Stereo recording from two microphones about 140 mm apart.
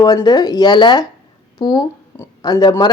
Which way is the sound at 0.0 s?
25° left (ahead or behind).